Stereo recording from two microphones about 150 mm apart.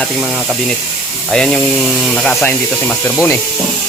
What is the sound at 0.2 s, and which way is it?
A man's voice, centre (ahead or behind).